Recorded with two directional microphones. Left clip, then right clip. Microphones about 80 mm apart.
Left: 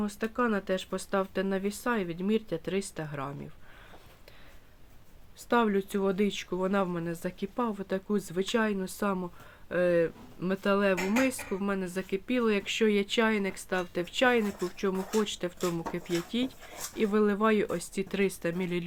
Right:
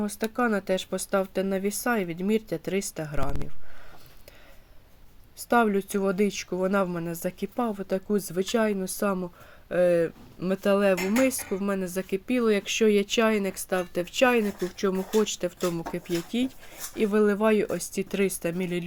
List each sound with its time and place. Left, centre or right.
0.0 s speech: right
5.5 s speech: right
9.6 s speech: right